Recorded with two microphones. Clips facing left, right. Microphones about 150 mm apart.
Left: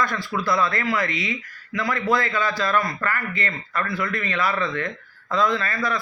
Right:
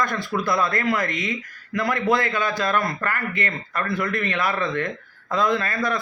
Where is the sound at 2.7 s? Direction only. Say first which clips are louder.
Even; 55° right (ahead or behind).